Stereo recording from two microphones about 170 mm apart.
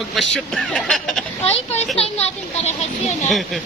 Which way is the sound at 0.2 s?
Centre (ahead or behind).